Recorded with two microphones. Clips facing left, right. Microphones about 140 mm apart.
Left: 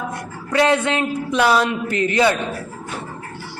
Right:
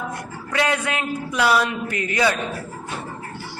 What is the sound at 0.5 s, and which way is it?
A woman's voice, 30° left (ahead or behind).